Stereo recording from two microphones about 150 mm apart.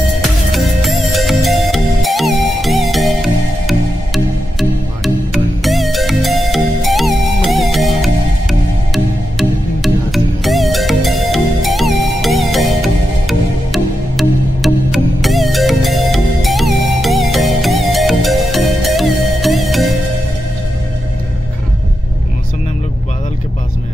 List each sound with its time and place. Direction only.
0.2 s music: centre (ahead or behind)